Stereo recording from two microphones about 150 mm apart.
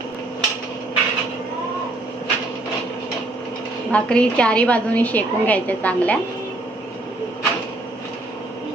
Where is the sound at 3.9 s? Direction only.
5° left (ahead or behind).